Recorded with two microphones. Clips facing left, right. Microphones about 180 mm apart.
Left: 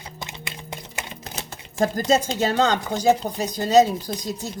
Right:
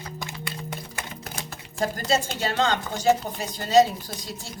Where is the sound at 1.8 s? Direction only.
45° left (ahead or behind).